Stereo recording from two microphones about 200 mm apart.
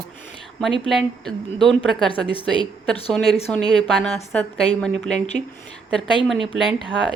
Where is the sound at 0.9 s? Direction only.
Centre (ahead or behind).